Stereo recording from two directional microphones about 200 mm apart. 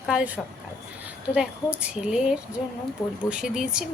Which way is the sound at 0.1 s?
5° right (ahead or behind).